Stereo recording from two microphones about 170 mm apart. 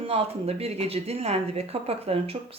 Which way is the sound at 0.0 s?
35° right (ahead or behind).